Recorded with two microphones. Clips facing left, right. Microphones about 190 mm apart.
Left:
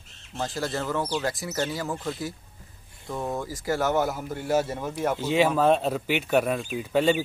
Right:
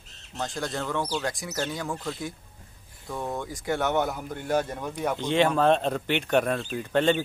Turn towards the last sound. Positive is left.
turn(degrees=5)  # may be behind; listen again after turning